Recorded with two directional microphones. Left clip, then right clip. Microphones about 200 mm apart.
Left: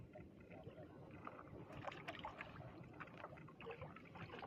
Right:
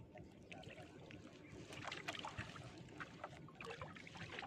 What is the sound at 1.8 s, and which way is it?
Boat, 20° right (ahead or behind).